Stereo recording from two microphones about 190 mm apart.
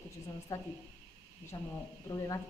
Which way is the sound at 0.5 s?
15° left (ahead or behind).